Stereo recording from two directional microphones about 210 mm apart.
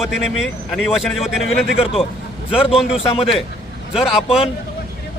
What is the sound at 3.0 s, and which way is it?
Speech, 25° left (ahead or behind).